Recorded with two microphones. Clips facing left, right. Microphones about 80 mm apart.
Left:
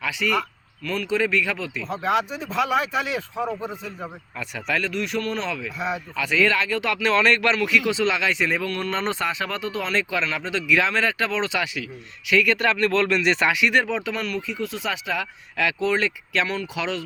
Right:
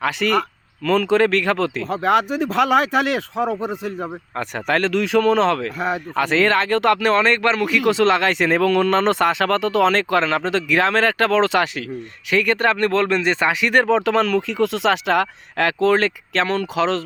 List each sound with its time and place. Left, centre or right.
0.0 s speech: right
0.9 s speech: right
4.4 s speech: right
5.6 s speech: right
7.2 s speech: right
12.3 s speech: right
14.1 s speech: right